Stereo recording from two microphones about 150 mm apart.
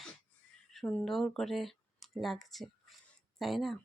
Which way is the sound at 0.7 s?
5° left (ahead or behind).